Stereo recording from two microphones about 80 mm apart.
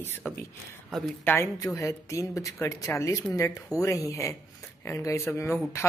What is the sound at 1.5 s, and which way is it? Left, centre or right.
Speech, left.